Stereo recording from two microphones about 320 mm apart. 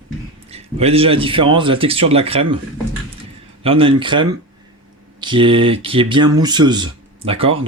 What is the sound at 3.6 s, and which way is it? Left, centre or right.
Speech, centre.